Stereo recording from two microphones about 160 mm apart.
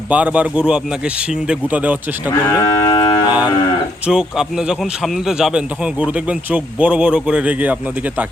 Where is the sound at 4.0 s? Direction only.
5° right (ahead or behind).